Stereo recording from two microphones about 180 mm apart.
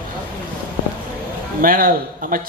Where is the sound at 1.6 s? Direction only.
50° right (ahead or behind).